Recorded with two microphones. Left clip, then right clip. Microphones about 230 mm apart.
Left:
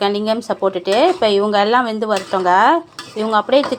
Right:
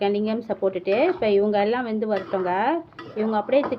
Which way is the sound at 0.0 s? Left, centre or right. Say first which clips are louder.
Left 6 dB; centre.